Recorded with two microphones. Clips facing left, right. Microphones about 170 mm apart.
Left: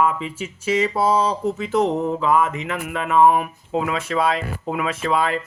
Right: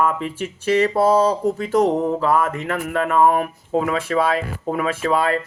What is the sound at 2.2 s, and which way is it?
Speech, 50° right (ahead or behind).